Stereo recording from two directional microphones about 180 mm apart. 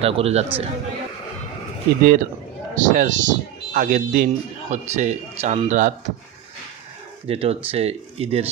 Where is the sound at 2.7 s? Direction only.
45° right (ahead or behind).